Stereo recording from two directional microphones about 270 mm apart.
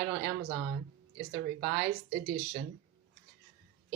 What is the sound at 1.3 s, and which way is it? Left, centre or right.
Speech, right.